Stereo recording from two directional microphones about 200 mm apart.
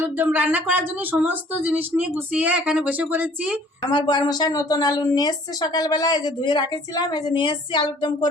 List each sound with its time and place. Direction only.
0.0 s speech: 10° right (ahead or behind)
3.9 s a woman's voice: 20° left (ahead or behind)